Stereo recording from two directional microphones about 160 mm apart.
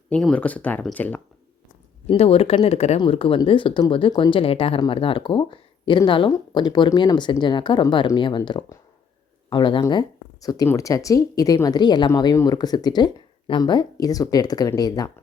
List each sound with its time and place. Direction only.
0.1 s speech: 5° left (ahead or behind)
2.0 s speech: 40° left (ahead or behind)